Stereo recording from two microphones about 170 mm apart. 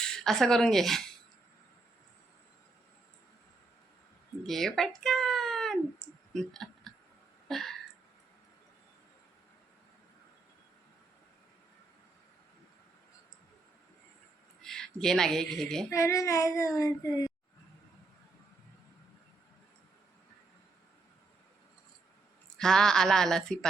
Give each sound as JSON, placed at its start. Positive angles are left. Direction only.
{"t": 0.0, "sound": "speech", "side_deg": 5}
{"t": 4.4, "sound": "speech", "side_deg": 0}
{"t": 7.4, "sound": "a sound", "side_deg": 0}
{"t": 14.6, "sound": "speech", "side_deg": 5}
{"t": 15.9, "sound": "child singing", "side_deg": 15}
{"t": 16.7, "sound": "speech", "side_deg": 20}
{"t": 22.5, "sound": "speech", "side_deg": 5}